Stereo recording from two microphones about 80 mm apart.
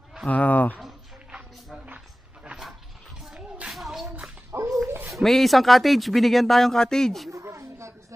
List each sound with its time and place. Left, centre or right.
0.3 s speech: centre
0.7 s a sound: centre
2.4 s dog: centre
3.3 s music: centre
3.7 s music: centre
4.5 s dog: right
4.8 s a sound: right
5.1 s speech: centre
7.2 s a sound: right